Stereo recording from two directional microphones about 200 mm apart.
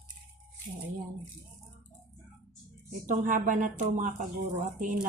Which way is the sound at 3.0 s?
40° right (ahead or behind).